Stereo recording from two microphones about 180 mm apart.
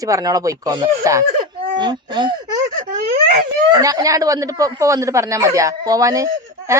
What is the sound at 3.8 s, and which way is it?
Speech, 20° right (ahead or behind).